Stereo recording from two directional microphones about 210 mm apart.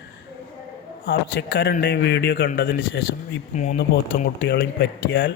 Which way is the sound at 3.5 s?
35° left (ahead or behind).